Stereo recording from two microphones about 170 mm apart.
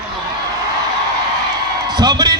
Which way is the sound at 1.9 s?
25° right (ahead or behind).